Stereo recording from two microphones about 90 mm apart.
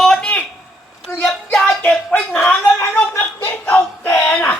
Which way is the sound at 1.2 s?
10° left (ahead or behind).